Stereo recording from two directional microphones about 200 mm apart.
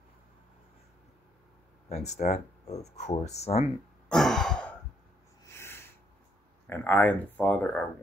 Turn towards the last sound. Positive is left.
turn(degrees=5)  # may be behind; listen again after turning